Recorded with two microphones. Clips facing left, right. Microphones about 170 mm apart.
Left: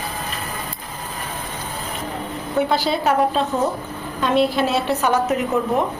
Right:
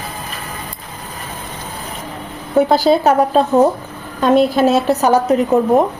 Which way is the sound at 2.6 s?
40° right (ahead or behind).